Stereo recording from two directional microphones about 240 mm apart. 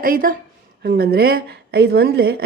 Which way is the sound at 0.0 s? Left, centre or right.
Right.